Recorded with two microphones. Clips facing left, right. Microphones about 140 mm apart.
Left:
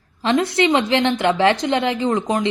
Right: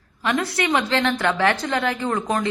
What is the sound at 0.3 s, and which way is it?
A woman's voice, 25° left (ahead or behind).